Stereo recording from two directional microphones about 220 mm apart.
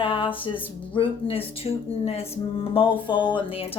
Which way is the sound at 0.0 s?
25° left (ahead or behind).